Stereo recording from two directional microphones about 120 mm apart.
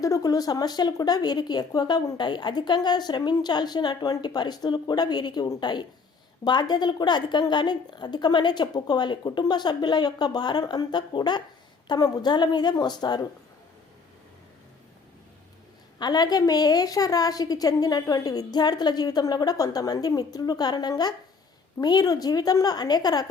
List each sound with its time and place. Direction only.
0.0 s speech: 30° left (ahead or behind)
16.0 s speech: 35° left (ahead or behind)